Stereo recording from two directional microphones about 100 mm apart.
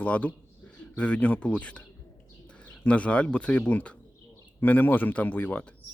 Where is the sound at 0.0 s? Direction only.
15° left (ahead or behind).